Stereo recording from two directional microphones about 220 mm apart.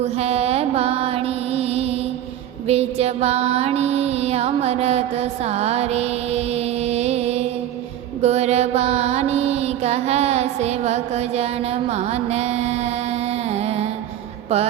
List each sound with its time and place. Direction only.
0.0 s mantra: 30° right (ahead or behind)
2.6 s music: 30° right (ahead or behind)
8.2 s mantra: 30° right (ahead or behind)